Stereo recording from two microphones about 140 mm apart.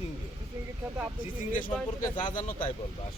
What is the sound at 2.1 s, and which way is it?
Speech, 35° left (ahead or behind).